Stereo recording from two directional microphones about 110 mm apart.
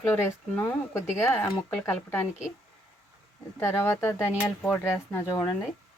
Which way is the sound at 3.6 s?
20° left (ahead or behind).